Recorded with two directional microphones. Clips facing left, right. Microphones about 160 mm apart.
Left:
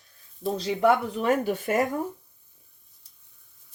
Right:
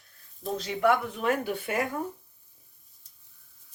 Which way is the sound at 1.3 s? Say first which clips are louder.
Left 8 dB; 45° left (ahead or behind).